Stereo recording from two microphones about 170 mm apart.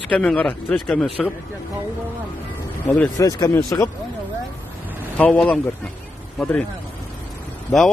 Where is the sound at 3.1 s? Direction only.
20° left (ahead or behind).